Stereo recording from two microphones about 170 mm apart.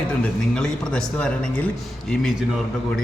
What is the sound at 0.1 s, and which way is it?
Speech, 5° left (ahead or behind).